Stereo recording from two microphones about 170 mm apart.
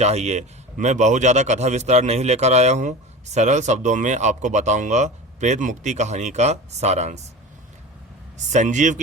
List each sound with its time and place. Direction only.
0.0 s speech: 40° right (ahead or behind)
8.4 s speech: 45° right (ahead or behind)